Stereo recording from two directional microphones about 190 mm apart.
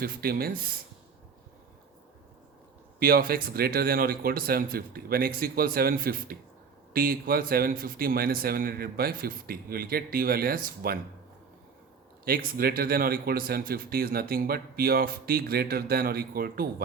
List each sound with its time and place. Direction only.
0.0 s a man's voice: 50° right (ahead or behind)
3.0 s a man's voice: 50° right (ahead or behind)
12.2 s a man's voice: 50° right (ahead or behind)